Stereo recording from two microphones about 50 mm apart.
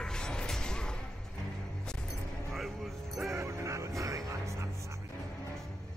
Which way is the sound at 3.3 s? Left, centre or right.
Right.